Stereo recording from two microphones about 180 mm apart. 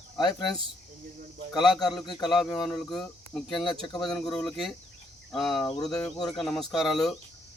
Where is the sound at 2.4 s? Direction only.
20° left (ahead or behind).